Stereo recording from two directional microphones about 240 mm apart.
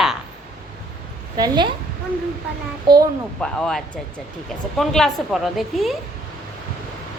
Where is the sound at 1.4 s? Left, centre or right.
Centre.